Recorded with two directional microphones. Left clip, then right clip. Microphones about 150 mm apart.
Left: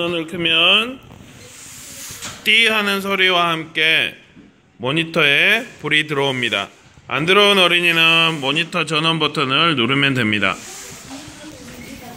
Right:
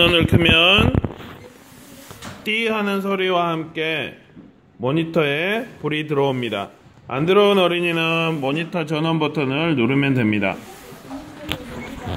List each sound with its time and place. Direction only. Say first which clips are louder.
0.0 s speech: right 5 dB; centre (ahead or behind)
2.4 s speech: left 7 dB; 10° right (ahead or behind)